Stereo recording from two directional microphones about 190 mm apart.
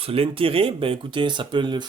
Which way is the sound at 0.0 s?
30° right (ahead or behind).